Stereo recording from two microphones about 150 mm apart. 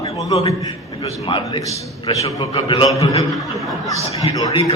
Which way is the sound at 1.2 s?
35° left (ahead or behind).